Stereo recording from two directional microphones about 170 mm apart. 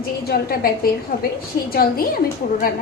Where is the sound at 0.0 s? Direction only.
60° left (ahead or behind).